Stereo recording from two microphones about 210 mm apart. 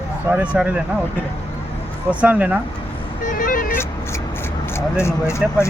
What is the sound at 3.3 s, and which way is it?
Vehicle, 40° left (ahead or behind).